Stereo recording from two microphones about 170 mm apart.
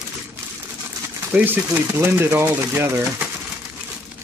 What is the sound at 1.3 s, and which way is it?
Speech, 10° right (ahead or behind).